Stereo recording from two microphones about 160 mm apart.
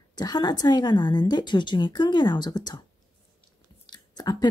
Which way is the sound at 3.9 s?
25° left (ahead or behind).